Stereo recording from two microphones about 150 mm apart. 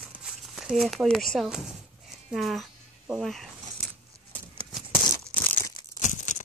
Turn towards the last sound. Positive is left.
turn(degrees=55)  # may be behind; listen again after turning